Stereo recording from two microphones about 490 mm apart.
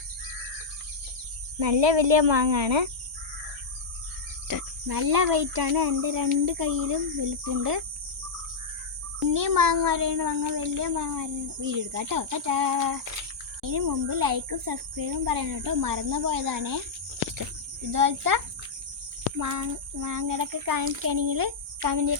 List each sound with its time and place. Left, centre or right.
1.5 s speech: right
4.4 s a child's voice: right
9.3 s a child's voice: right
17.9 s a child's voice: right